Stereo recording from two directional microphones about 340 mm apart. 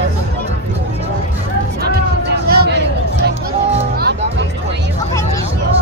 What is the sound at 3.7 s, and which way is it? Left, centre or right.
Music, right.